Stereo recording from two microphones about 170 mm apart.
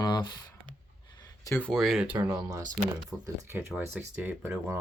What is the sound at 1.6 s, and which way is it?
Speech, centre (ahead or behind).